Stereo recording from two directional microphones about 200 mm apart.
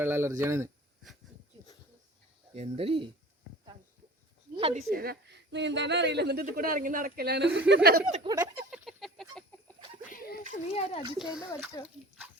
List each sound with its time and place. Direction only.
0.0 s speech: 10° right (ahead or behind)
2.5 s speech: 30° right (ahead or behind)
4.5 s a sound: 30° right (ahead or behind)
4.9 s speech: 50° right (ahead or behind)
8.1 s speech: 25° right (ahead or behind)
8.4 s a sound: 5° right (ahead or behind)
10.1 s a sound: 50° left (ahead or behind)
10.8 s speech: 30° left (ahead or behind)
11.2 s speech: 5° right (ahead or behind)